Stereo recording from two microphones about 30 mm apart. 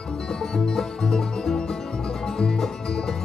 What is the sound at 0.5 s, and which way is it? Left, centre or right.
Music, centre.